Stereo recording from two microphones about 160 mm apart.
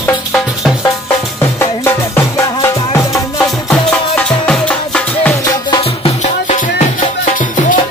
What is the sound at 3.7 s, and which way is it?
Music, 10° left (ahead or behind).